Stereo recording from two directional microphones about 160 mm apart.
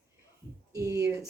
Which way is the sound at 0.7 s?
20° right (ahead or behind).